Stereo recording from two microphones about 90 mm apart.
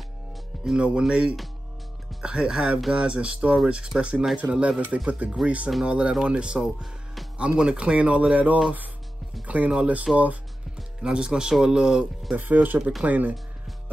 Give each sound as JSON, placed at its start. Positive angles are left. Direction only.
{"t": 0.7, "sound": "speech", "side_deg": -10}